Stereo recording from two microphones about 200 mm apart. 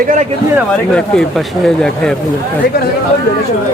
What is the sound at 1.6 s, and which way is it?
Speech, 5° left (ahead or behind).